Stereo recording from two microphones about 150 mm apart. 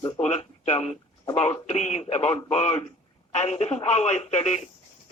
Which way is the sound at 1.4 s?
45° left (ahead or behind).